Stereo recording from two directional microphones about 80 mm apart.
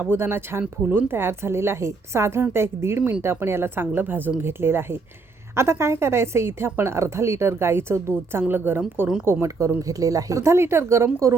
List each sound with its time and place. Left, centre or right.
0.0 s a woman's voice: right